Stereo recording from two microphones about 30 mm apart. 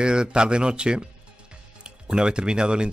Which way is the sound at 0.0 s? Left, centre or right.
Right.